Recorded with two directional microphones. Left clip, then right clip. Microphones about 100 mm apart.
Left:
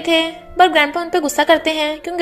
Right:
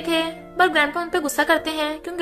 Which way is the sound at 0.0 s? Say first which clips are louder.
Left 6 dB; 35° left (ahead or behind).